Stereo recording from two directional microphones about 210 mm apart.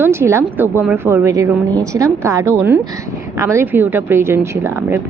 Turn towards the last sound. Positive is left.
turn(degrees=-10)  # may be behind; listen again after turning